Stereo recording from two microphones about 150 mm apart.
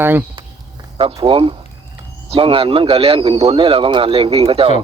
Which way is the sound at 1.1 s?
35° right (ahead or behind).